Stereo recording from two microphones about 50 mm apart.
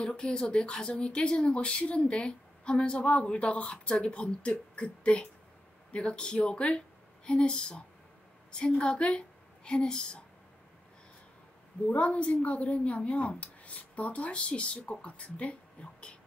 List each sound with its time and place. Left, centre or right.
0.0 s speech: centre
11.9 s speech: left